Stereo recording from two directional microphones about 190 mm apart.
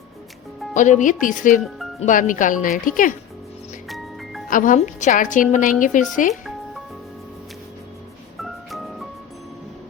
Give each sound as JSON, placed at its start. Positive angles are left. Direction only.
{"t": 0.7, "sound": "a woman's voice", "side_deg": 40}
{"t": 3.8, "sound": "music", "side_deg": 0}
{"t": 4.4, "sound": "a woman's voice", "side_deg": 45}
{"t": 8.4, "sound": "music", "side_deg": 0}